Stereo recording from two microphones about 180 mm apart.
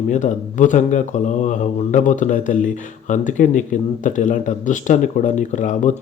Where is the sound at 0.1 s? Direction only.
45° left (ahead or behind).